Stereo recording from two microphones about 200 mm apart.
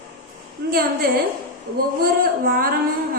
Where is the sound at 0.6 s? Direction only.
55° right (ahead or behind).